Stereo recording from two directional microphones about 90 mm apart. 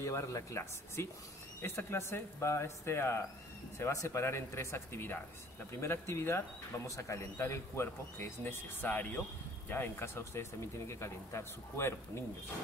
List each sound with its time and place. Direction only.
0.0 s speech: 35° left (ahead or behind)